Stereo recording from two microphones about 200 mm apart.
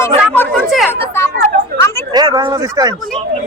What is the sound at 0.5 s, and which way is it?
Speech, centre (ahead or behind).